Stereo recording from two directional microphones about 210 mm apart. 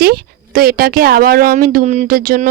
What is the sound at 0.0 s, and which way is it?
Speech, 45° right (ahead or behind).